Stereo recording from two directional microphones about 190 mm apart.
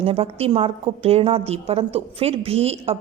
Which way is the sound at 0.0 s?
30° right (ahead or behind).